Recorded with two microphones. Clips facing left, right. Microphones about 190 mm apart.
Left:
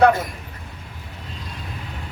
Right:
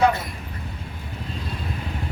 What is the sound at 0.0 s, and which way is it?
Speech, 45° left (ahead or behind).